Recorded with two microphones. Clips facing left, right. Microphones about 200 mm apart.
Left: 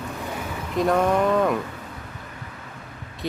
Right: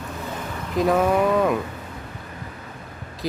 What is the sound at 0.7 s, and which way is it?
Speech, centre (ahead or behind).